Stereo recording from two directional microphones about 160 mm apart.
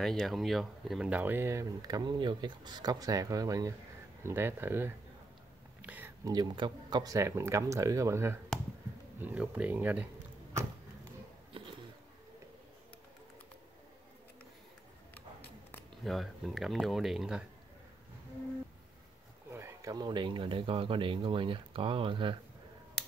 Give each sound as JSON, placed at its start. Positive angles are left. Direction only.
{"t": 0.0, "sound": "speech", "side_deg": 0}
{"t": 5.8, "sound": "a sound", "side_deg": -10}
{"t": 6.2, "sound": "speech", "side_deg": -25}
{"t": 16.0, "sound": "speech", "side_deg": 0}
{"t": 19.5, "sound": "speech", "side_deg": -20}